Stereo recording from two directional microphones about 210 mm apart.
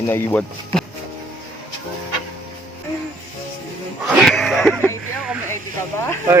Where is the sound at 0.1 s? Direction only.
10° left (ahead or behind).